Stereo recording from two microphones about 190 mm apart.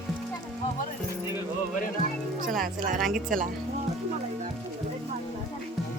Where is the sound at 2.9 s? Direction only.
Centre (ahead or behind).